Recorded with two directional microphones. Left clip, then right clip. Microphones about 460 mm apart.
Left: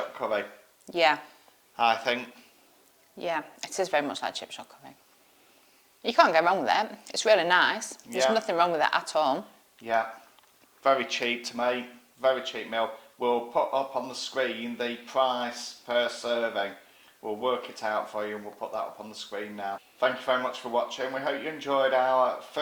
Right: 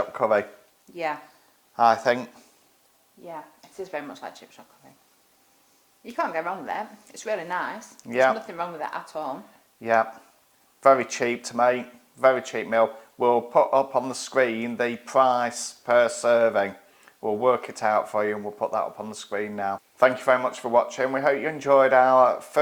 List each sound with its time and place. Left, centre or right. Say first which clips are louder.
0.2 s speech: right 8 dB; right
1.7 s speech: right 5 dB; right
3.2 s a woman's voice: left 8 dB; left
6.1 s a woman's voice: left 7 dB; left
8.1 s speech: right 7 dB; right
8.4 s a woman's voice: left 7 dB; left
10.8 s speech: right 6 dB; right